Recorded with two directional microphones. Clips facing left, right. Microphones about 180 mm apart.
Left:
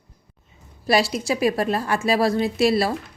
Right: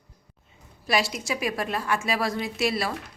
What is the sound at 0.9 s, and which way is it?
A woman's voice, 35° left (ahead or behind).